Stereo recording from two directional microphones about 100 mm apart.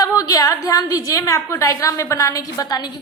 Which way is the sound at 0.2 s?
35° left (ahead or behind).